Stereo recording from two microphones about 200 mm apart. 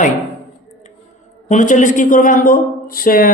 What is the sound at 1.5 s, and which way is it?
A man's voice, 40° left (ahead or behind).